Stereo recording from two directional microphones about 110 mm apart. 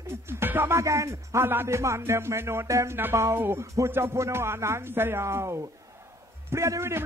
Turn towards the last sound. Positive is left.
turn(degrees=-25)  # may be behind; listen again after turning